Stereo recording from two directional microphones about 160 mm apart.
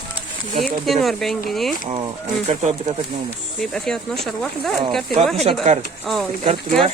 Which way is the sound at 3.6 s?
5° left (ahead or behind).